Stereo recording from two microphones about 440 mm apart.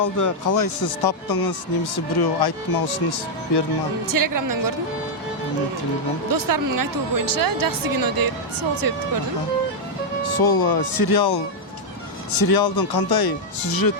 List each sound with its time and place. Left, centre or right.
0.0 s speech: left
4.0 s a woman's voice: right
6.2 s a woman's voice: right
10.2 s speech: left